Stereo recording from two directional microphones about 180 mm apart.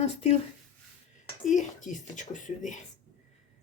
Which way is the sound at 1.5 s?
45° left (ahead or behind).